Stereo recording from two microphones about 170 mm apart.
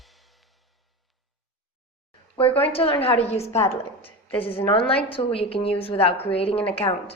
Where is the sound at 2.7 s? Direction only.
30° left (ahead or behind).